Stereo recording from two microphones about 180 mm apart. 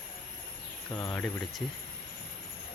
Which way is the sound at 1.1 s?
5° left (ahead or behind).